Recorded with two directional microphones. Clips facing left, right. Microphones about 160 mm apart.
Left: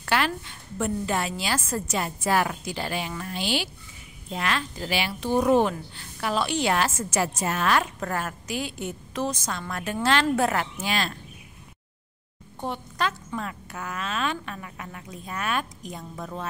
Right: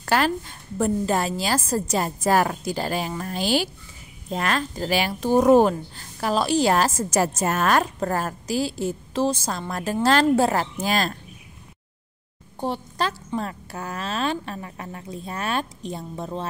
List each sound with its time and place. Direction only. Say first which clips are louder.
0.0 s a woman's voice: right 4 dB; 40° right (ahead or behind)
12.5 s a woman's voice: right 4 dB; 30° right (ahead or behind)